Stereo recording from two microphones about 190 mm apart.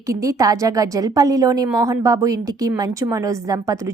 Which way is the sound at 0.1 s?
15° right (ahead or behind).